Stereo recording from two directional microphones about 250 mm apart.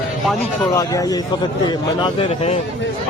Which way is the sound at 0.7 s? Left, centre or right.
Centre.